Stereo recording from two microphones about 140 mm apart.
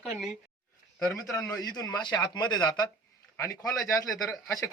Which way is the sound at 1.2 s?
20° left (ahead or behind).